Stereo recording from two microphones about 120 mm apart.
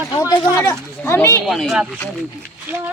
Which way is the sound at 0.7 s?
20° left (ahead or behind).